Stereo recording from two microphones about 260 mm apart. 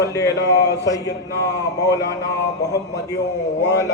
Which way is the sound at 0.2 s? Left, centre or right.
Left.